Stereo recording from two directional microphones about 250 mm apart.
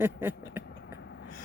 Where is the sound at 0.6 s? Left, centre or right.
Left.